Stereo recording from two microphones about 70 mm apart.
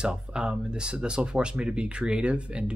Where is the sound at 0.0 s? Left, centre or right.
Centre.